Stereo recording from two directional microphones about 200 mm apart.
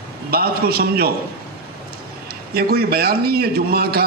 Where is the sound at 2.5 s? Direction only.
50° right (ahead or behind).